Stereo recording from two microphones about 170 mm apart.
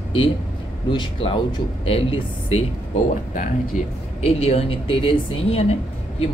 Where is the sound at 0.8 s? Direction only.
30° left (ahead or behind).